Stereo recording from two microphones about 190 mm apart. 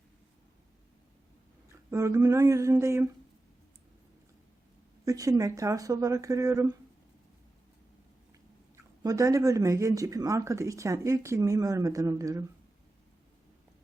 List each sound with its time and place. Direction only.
1.9 s speech: 15° right (ahead or behind)
5.0 s speech: 20° right (ahead or behind)
8.7 s speech: 15° right (ahead or behind)